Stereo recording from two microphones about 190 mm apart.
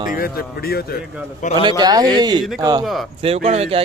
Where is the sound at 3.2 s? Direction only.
35° right (ahead or behind).